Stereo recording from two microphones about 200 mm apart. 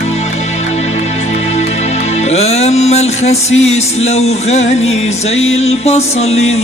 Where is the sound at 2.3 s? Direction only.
30° left (ahead or behind).